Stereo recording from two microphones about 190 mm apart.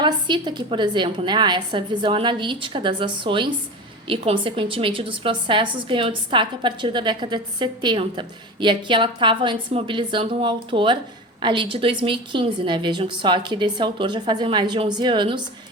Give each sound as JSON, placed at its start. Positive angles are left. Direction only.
{"t": 0.0, "sound": "a woman's voice", "side_deg": -25}